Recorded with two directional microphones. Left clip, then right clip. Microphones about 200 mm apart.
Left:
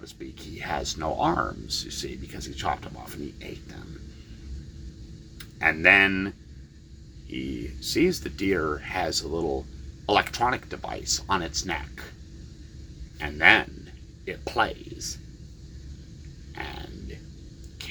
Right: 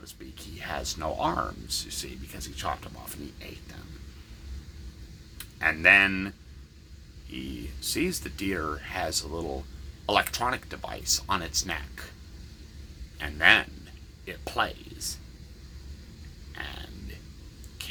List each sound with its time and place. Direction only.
0.0 s speech: 10° right (ahead or behind)
5.4 s speech: 5° right (ahead or behind)
13.1 s speech: 10° right (ahead or behind)
16.6 s grunt: 10° right (ahead or behind)